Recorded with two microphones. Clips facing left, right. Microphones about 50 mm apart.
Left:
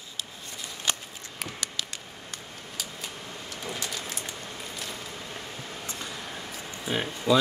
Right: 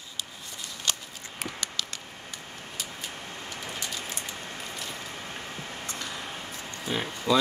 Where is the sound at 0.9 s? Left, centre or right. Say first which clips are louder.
Left 1 dB; centre.